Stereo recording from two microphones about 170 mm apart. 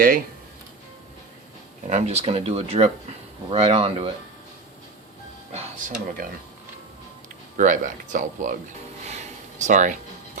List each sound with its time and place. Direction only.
1.9 s speech: 40° right (ahead or behind)
5.5 s speech: 50° right (ahead or behind)
7.5 s speech: 50° right (ahead or behind)
9.6 s speech: 45° right (ahead or behind)